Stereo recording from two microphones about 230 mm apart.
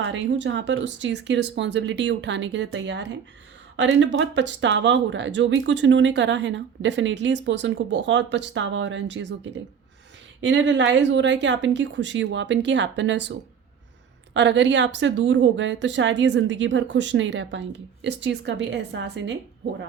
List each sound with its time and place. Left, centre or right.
0.0 s speech: right
14.3 s speech: right